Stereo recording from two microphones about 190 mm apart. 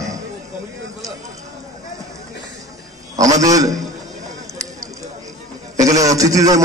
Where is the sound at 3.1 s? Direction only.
20° right (ahead or behind).